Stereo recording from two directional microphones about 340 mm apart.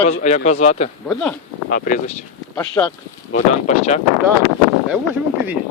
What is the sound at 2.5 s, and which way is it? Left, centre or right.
Speech, centre.